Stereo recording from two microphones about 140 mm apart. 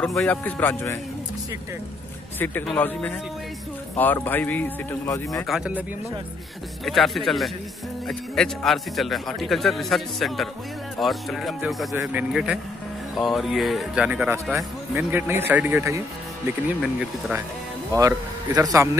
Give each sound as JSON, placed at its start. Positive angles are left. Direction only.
{"t": 0.0, "sound": "a man's voice", "side_deg": 5}
{"t": 2.3, "sound": "a man's voice", "side_deg": 15}
{"t": 5.5, "sound": "a man's voice", "side_deg": -5}
{"t": 16.6, "sound": "speech", "side_deg": -10}
{"t": 17.9, "sound": "speech", "side_deg": -25}